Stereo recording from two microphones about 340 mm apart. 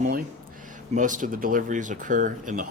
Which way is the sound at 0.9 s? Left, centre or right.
Right.